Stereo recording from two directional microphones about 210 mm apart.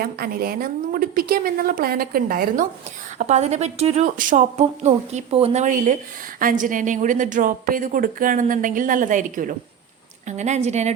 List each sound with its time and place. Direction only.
0.0 s a woman's voice: 45° right (ahead or behind)